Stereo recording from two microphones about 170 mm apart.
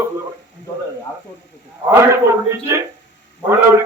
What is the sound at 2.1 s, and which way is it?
Speech, 15° right (ahead or behind).